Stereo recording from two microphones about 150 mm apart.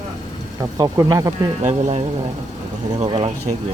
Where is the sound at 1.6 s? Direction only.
45° right (ahead or behind).